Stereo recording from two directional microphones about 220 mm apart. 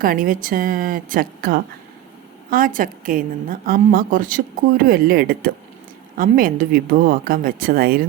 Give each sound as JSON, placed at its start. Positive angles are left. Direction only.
{"t": 0.0, "sound": "a woman's voice", "side_deg": -40}